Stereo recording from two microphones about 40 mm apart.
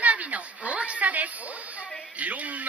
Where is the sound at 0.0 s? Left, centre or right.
Right.